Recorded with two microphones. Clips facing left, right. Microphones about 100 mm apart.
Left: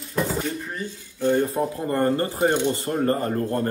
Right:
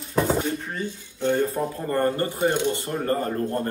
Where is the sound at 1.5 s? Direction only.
25° left (ahead or behind).